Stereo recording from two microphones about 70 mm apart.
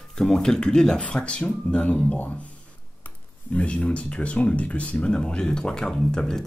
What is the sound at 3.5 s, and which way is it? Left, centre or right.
Speech, centre.